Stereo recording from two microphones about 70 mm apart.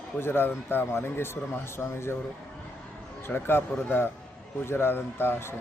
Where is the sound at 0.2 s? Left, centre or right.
Left.